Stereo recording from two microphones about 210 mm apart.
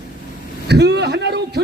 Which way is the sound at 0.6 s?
55° right (ahead or behind).